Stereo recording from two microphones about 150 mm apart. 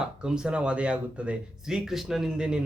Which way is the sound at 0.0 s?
5° right (ahead or behind).